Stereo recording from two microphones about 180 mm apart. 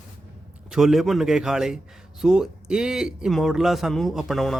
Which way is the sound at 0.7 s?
Centre (ahead or behind).